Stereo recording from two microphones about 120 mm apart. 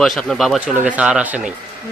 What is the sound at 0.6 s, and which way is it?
Speech, 10° right (ahead or behind).